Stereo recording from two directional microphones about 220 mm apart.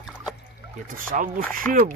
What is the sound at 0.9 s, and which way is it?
Speech, 40° right (ahead or behind).